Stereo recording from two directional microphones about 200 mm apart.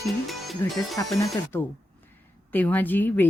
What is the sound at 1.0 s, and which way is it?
A woman's voice, 15° left (ahead or behind).